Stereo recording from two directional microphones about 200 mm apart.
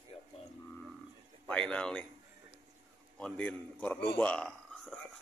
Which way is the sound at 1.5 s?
5° left (ahead or behind).